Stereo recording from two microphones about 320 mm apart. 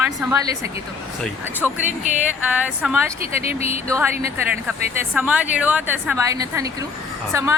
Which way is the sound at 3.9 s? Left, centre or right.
Centre.